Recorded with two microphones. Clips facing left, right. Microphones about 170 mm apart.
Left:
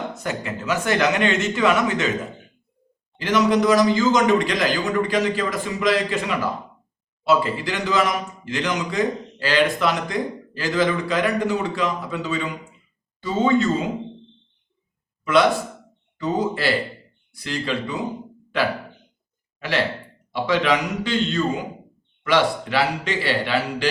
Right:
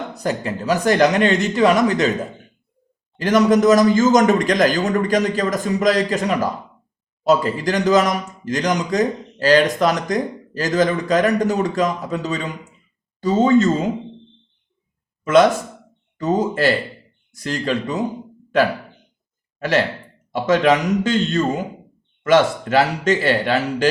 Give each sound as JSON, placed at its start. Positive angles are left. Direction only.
{"t": 0.1, "sound": "speech", "side_deg": -35}
{"t": 3.2, "sound": "a man's voice", "side_deg": -45}
{"t": 15.2, "sound": "a man's voice", "side_deg": -45}
{"t": 19.5, "sound": "a man's voice", "side_deg": -45}